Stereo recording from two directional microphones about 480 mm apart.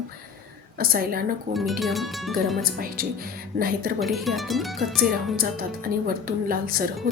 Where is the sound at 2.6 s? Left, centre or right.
Centre.